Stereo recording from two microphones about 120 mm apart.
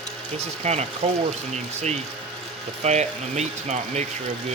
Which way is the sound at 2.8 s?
70° right (ahead or behind).